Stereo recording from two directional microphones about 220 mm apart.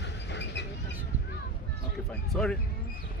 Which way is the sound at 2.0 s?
Centre (ahead or behind).